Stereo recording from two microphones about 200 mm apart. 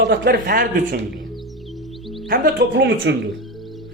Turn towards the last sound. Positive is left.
turn(degrees=-65)  # may be behind; listen again after turning